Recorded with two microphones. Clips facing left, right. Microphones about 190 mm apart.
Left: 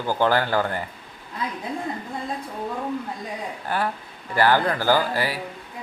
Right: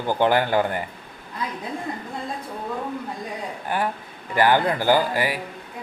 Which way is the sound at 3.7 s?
15° right (ahead or behind).